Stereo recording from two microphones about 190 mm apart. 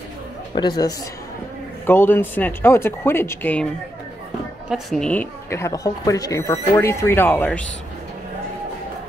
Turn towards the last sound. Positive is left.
turn(degrees=10)  # may be behind; listen again after turning